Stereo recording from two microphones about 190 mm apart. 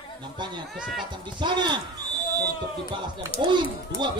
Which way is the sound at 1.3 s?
25° right (ahead or behind).